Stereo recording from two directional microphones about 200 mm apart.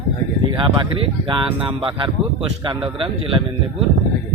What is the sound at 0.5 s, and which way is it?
Speech, 25° right (ahead or behind).